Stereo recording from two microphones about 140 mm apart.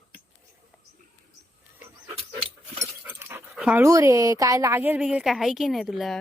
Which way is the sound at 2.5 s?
45° right (ahead or behind).